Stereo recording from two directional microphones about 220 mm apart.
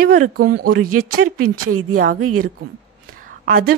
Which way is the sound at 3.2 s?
40° right (ahead or behind).